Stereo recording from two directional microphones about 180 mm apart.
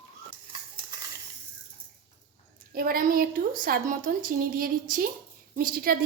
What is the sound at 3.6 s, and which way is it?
A woman's voice, 50° right (ahead or behind).